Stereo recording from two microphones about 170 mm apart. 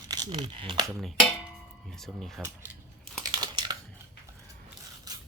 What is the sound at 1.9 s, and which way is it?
Speech, centre (ahead or behind).